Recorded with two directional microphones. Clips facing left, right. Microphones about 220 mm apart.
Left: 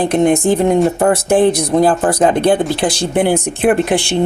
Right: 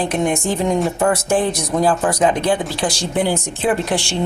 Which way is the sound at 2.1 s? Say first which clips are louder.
Left 5 dB; 60° left (ahead or behind).